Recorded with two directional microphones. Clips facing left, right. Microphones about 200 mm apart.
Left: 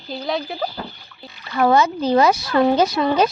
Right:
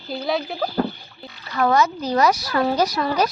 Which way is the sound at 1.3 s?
25° left (ahead or behind).